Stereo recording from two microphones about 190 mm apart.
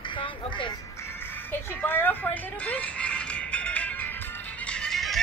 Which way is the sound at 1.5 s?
10° left (ahead or behind).